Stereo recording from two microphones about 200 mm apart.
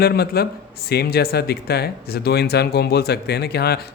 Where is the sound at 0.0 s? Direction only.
50° left (ahead or behind).